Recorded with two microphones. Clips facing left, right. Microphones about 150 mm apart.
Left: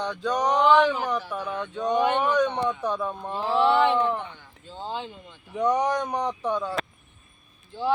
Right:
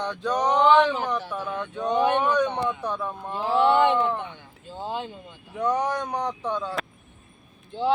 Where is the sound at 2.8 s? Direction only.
15° left (ahead or behind).